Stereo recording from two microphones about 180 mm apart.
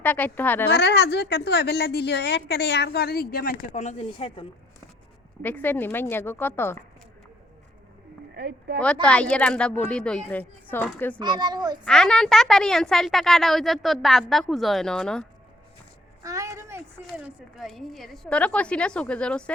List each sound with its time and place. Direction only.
0.0 s a woman's voice: 10° left (ahead or behind)
0.7 s a woman's voice: 70° left (ahead or behind); by 3.6 s 55° left (ahead or behind)
3.7 s speech: 40° left (ahead or behind)
5.4 s a woman's voice: 10° left (ahead or behind)
8.4 s speech: 65° right (ahead or behind)
8.8 s a woman's voice: 5° left (ahead or behind)
11.2 s a child's voice: 25° right (ahead or behind)
11.9 s speech: 5° left (ahead or behind)
16.2 s a sound: 20° right (ahead or behind)
17.2 s speech: centre (ahead or behind)